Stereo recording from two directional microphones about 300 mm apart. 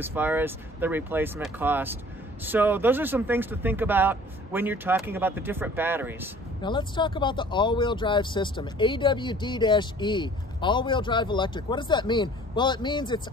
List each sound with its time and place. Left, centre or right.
0.0 s speech: centre
6.6 s speech: centre